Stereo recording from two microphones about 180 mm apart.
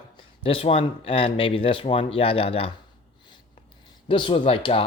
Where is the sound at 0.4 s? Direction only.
30° left (ahead or behind).